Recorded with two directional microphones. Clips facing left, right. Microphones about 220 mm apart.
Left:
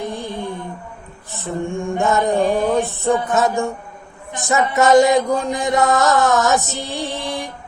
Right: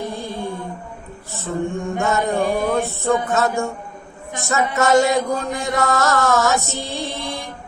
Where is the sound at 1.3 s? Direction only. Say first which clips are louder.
Even; 15° left (ahead or behind).